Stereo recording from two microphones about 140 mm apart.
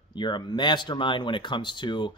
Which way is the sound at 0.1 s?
35° left (ahead or behind).